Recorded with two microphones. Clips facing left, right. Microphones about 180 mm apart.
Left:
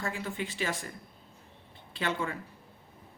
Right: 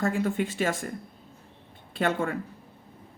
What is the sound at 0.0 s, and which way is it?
Speech, 50° right (ahead or behind).